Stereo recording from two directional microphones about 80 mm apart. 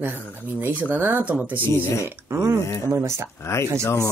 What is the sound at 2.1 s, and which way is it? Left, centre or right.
Speech, right.